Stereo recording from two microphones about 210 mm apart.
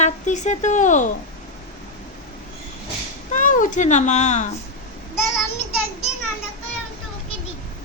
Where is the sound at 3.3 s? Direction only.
40° left (ahead or behind).